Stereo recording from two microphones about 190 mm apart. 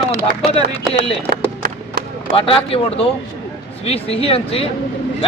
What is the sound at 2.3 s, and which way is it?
Speech, 30° left (ahead or behind).